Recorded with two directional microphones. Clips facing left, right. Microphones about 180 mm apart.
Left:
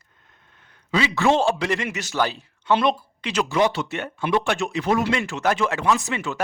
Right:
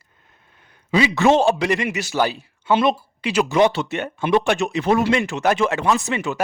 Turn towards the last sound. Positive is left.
turn(degrees=-15)  # may be behind; listen again after turning